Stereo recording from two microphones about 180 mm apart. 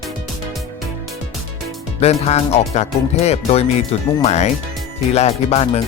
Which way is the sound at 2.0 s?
35° left (ahead or behind).